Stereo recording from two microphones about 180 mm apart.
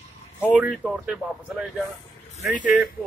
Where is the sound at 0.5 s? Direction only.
5° right (ahead or behind).